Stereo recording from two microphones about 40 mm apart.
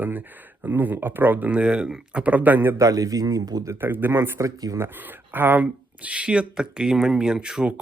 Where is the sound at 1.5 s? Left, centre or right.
Right.